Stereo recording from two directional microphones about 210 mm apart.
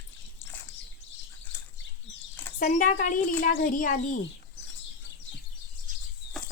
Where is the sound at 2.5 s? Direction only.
35° left (ahead or behind).